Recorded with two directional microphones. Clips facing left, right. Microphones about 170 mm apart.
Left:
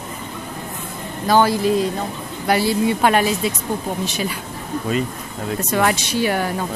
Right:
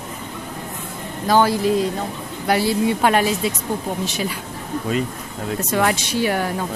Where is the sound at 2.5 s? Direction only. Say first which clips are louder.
Left 1 dB; 5° left (ahead or behind).